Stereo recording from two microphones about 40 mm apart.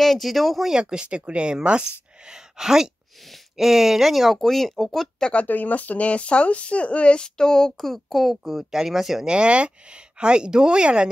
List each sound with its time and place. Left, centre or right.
0.0 s a woman's voice: centre
0.7 s a woman's voice: right; by 5.1 s centre
5.3 s speech: left
7.2 s a woman's voice: centre
9.2 s speech: right